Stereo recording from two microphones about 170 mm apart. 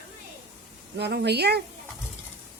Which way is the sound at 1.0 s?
75° right (ahead or behind).